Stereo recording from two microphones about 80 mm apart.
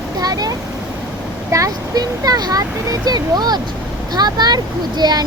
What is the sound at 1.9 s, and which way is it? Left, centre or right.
Speech, right.